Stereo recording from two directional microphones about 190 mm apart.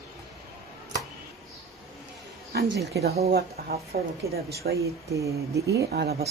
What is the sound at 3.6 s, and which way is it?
Speech, 55° right (ahead or behind).